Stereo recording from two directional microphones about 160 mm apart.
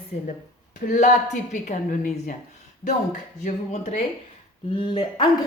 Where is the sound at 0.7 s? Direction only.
50° left (ahead or behind).